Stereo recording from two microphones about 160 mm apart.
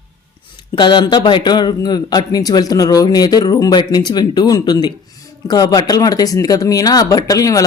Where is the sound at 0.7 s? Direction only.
30° left (ahead or behind).